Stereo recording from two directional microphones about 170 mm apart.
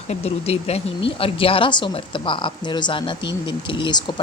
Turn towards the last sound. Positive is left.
turn(degrees=30)  # may be behind; listen again after turning